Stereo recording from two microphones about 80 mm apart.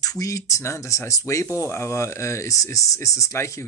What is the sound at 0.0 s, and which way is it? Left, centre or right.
Speech, left.